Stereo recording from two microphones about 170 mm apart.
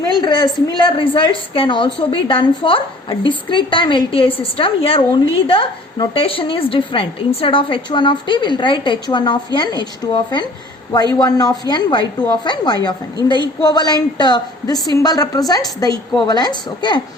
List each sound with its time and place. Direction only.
0.2 s a woman's voice: 25° left (ahead or behind)